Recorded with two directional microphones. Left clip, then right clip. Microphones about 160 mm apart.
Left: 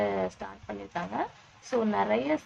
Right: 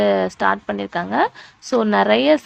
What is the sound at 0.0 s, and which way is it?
A woman's voice, 50° right (ahead or behind).